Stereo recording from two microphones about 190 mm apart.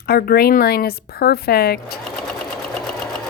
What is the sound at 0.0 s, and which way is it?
A woman's voice, 50° left (ahead or behind).